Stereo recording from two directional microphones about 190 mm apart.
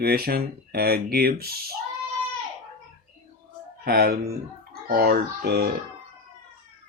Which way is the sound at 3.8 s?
55° right (ahead or behind).